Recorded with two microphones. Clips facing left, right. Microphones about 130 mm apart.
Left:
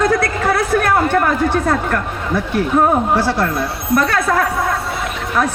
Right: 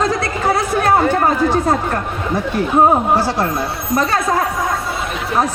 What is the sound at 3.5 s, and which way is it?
Speech, 65° left (ahead or behind).